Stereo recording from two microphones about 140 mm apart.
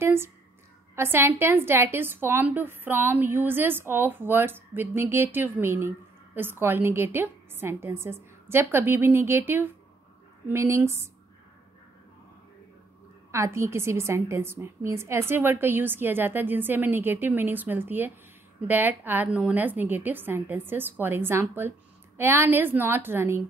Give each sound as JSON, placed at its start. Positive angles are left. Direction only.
{"t": 0.0, "sound": "a sound", "side_deg": -15}
{"t": 0.9, "sound": "a woman's voice", "side_deg": -15}
{"t": 13.3, "sound": "a woman's voice", "side_deg": -20}